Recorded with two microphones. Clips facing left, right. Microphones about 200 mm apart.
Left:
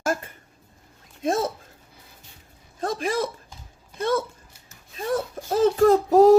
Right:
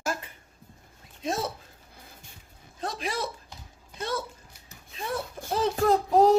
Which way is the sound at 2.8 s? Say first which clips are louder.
Left 7 dB; 50° left (ahead or behind).